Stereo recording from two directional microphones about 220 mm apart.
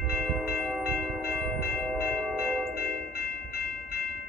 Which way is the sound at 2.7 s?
45° left (ahead or behind).